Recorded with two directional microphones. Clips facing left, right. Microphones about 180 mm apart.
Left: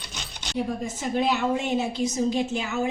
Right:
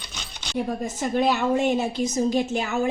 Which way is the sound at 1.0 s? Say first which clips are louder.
Right 2 dB; 50° right (ahead or behind).